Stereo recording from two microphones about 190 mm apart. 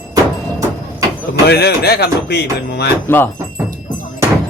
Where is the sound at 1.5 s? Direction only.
55° left (ahead or behind).